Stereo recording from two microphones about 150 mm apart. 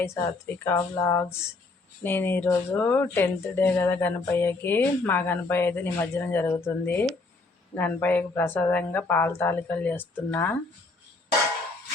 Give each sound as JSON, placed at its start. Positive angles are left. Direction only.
{"t": 0.0, "sound": "speech", "side_deg": 15}